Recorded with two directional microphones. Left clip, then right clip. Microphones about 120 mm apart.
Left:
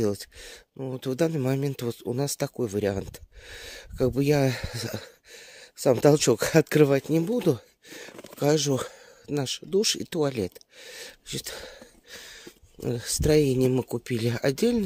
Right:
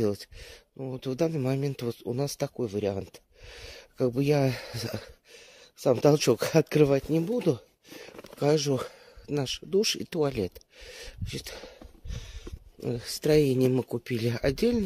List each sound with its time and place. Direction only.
0.0 s speech: 35° left (ahead or behind)
2.5 s speech: 55° left (ahead or behind); by 13.3 s 35° left (ahead or behind)
13.3 s speech: 25° left (ahead or behind)